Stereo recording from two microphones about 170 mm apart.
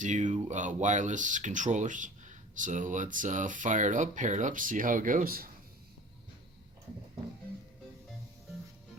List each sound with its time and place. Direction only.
0.0 s speech: 45° right (ahead or behind)